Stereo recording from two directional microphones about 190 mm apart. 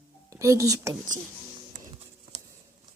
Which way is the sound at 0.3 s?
15° right (ahead or behind).